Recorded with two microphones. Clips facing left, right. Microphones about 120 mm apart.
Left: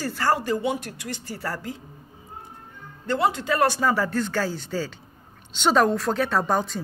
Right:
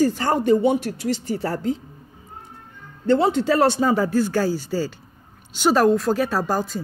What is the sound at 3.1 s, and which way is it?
Speech, 30° right (ahead or behind).